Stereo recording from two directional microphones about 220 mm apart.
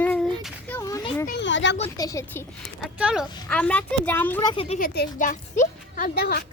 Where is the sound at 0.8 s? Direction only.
15° left (ahead or behind).